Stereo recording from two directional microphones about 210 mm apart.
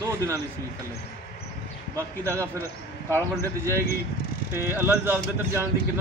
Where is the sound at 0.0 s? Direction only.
15° right (ahead or behind).